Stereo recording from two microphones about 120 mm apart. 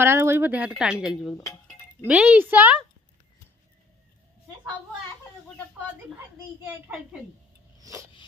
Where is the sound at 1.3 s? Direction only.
25° left (ahead or behind).